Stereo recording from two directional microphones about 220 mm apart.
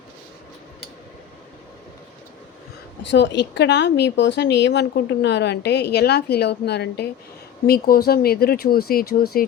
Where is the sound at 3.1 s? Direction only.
50° left (ahead or behind).